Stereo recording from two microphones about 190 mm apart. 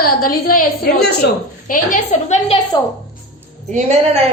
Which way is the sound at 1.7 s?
40° left (ahead or behind).